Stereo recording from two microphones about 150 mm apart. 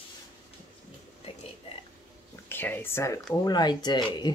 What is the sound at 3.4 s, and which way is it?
Speech, 30° left (ahead or behind).